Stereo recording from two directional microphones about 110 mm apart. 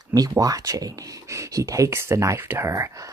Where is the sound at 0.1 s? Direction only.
35° right (ahead or behind).